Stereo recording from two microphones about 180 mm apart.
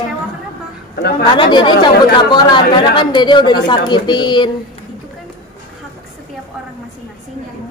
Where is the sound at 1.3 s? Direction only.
25° left (ahead or behind).